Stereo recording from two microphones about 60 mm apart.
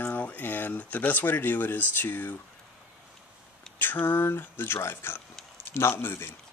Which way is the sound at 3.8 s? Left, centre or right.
Left.